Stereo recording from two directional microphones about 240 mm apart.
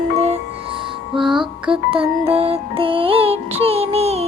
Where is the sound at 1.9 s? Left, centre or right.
Right.